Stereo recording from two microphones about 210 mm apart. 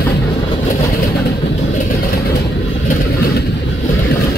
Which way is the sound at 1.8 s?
45° left (ahead or behind).